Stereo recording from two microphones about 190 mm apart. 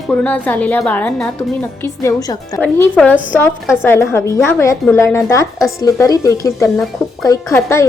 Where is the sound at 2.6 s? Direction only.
10° left (ahead or behind).